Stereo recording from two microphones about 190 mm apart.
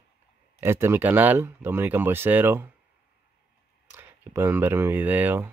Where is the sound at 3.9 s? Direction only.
15° right (ahead or behind).